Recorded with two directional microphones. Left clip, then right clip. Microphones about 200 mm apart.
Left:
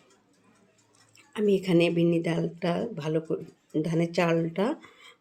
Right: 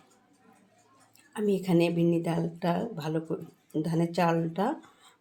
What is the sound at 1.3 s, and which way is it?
Speech, 20° left (ahead or behind).